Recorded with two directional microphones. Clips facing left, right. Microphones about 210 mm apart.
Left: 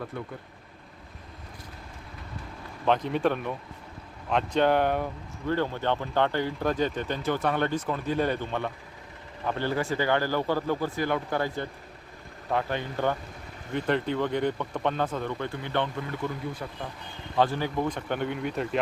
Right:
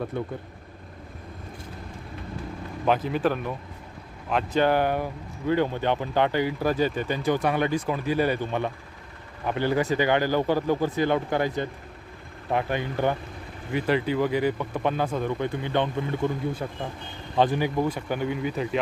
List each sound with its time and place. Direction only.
0.1 s speech: 25° right (ahead or behind)
2.8 s speech: 5° right (ahead or behind)